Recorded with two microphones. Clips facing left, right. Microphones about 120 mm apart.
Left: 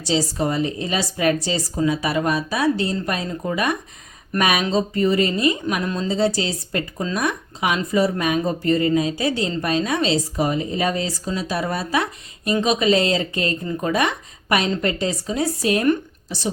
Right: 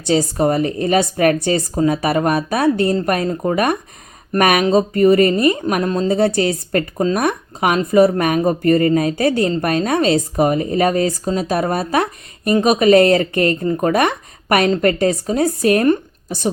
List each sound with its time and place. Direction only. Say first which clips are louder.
0.0 s speech: right 6 dB; 55° right (ahead or behind)